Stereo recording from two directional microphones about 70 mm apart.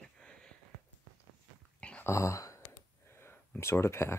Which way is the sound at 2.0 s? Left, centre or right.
Left.